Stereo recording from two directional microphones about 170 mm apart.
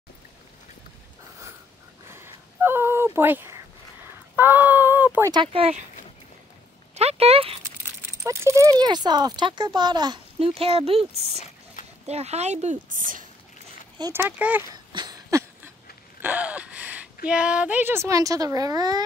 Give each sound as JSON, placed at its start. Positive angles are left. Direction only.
{"t": 2.0, "sound": "a sound", "side_deg": -15}
{"t": 5.3, "sound": "speech", "side_deg": -30}
{"t": 7.0, "sound": "speech", "side_deg": -35}
{"t": 8.2, "sound": "speech", "side_deg": -15}
{"t": 11.8, "sound": "dog", "side_deg": 50}
{"t": 12.1, "sound": "speech", "side_deg": -40}
{"t": 14.1, "sound": "speech", "side_deg": -10}
{"t": 14.9, "sound": "a sound", "side_deg": -25}
{"t": 16.2, "sound": "gasp", "side_deg": -10}
{"t": 17.3, "sound": "speech", "side_deg": -5}